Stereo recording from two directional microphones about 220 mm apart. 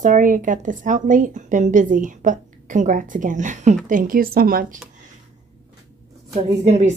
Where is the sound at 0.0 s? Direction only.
35° right (ahead or behind).